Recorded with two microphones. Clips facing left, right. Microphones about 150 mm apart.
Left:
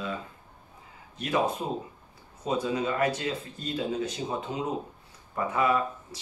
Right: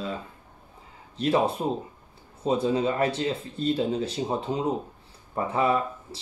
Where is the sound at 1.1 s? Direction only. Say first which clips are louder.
Right 4 dB; 30° right (ahead or behind).